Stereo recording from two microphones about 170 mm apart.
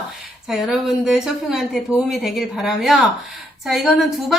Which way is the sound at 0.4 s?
Centre (ahead or behind).